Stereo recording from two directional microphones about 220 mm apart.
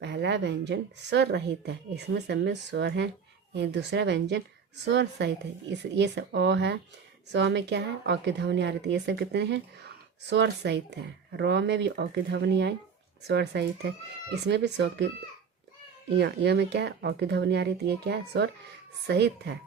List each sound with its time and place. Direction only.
0.0 s a woman's voice: 50° right (ahead or behind)
16.1 s a woman's voice: 50° right (ahead or behind)